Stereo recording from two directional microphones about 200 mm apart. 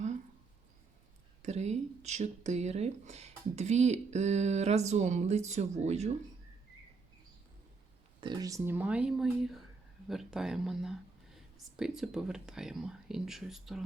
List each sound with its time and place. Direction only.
1.4 s speech: 35° right (ahead or behind)
8.2 s speech: 20° right (ahead or behind); by 13.8 s centre (ahead or behind)